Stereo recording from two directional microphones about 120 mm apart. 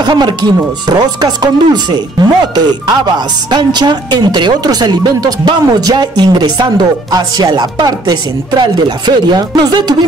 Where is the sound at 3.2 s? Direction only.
35° right (ahead or behind).